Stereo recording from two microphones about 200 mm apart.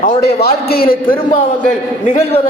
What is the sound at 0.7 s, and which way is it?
Speech, 50° left (ahead or behind).